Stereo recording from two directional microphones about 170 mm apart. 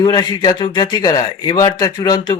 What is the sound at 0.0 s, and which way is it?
A man's voice, 25° left (ahead or behind).